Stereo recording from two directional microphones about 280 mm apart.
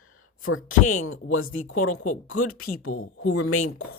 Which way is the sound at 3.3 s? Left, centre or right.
Left.